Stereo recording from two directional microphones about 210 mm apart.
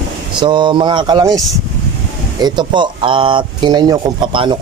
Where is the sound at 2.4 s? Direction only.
20° right (ahead or behind).